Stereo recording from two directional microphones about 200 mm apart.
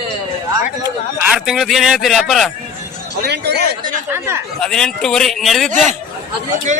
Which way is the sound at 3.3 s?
55° right (ahead or behind).